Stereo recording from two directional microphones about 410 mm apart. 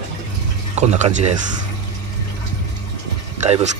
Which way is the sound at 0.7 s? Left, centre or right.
Centre.